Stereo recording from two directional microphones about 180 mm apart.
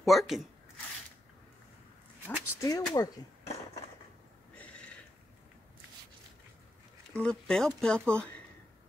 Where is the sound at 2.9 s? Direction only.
20° left (ahead or behind).